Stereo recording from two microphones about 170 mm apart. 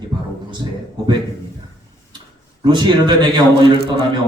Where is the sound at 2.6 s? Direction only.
25° right (ahead or behind).